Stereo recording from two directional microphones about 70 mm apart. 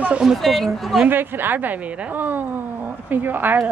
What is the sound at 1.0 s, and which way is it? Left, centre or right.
A woman's voice, right.